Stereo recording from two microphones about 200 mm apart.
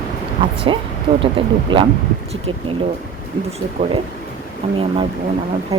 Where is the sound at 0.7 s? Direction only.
25° right (ahead or behind).